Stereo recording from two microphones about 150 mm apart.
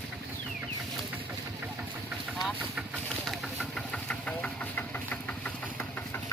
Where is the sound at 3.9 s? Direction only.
10° left (ahead or behind).